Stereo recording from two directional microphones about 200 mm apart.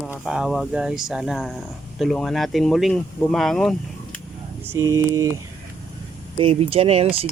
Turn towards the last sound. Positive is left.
turn(degrees=-30)  # may be behind; listen again after turning